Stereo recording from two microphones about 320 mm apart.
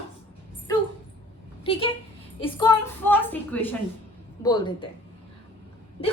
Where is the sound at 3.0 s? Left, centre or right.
Centre.